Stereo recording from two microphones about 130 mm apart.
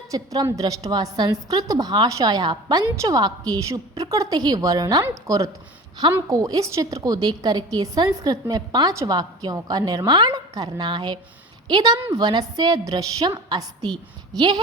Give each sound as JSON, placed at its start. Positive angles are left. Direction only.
{"t": 0.1, "sound": "a woman's voice", "side_deg": -25}